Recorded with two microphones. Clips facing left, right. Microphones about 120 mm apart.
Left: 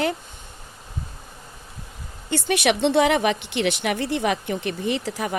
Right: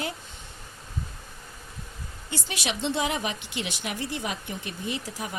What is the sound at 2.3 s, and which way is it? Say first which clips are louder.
Speech: left 11 dB; 60° left (ahead or behind).